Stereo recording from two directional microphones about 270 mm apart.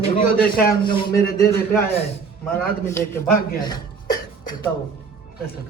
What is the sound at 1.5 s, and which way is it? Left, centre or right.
Speech, centre.